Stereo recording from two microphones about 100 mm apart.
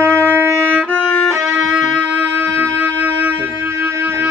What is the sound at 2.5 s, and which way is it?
Music, 20° right (ahead or behind).